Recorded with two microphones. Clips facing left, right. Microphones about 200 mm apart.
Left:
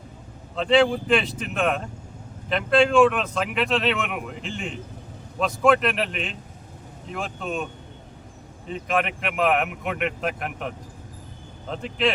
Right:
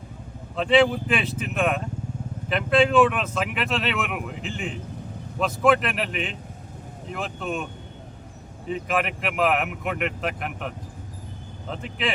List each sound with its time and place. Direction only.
0.5 s speech: 5° right (ahead or behind)
8.6 s speech: 5° right (ahead or behind)